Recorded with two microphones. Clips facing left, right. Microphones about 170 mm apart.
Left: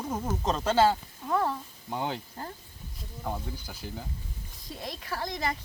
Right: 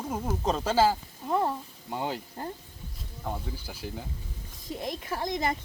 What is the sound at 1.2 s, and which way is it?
Speech, 20° right (ahead or behind).